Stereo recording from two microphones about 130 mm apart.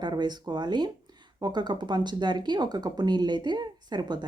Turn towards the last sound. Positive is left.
turn(degrees=-35)  # may be behind; listen again after turning